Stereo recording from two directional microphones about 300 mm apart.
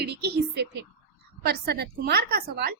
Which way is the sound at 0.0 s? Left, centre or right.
Right.